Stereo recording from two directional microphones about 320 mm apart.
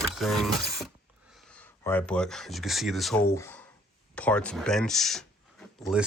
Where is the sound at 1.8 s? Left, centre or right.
Centre.